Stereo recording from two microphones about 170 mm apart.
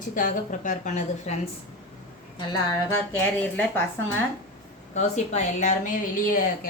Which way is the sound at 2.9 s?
10° left (ahead or behind).